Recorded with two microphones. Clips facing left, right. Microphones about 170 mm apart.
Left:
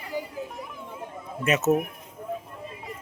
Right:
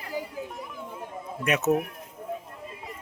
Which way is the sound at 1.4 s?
Centre (ahead or behind).